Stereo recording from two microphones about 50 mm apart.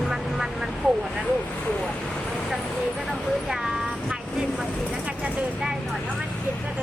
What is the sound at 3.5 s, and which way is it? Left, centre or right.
Vehicle, centre.